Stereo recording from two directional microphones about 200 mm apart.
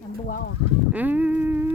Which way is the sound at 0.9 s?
10° right (ahead or behind).